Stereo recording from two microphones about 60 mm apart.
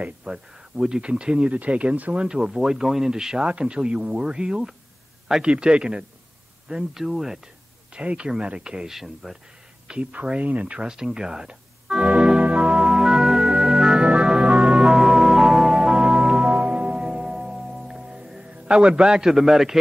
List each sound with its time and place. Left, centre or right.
0.0 s speech: centre
2.2 s speech: centre
7.9 s speech: centre
9.8 s a sound: centre
18.5 s speech: centre